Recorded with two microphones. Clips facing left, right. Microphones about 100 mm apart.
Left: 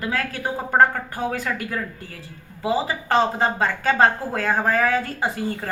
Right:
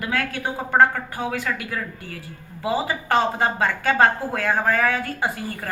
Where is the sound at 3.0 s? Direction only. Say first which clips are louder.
Left 1 dB; 30° left (ahead or behind).